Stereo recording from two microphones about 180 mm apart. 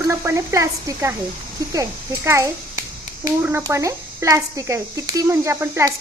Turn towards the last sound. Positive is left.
turn(degrees=-15)  # may be behind; listen again after turning